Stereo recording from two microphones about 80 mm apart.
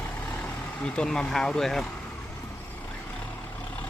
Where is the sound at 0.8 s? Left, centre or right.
Centre.